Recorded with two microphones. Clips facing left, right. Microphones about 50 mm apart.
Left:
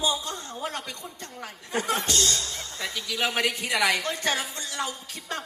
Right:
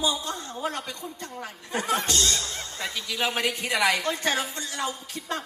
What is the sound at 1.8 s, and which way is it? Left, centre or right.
Speech, right.